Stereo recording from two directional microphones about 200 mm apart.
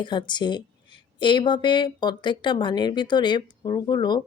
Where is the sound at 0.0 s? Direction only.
20° left (ahead or behind).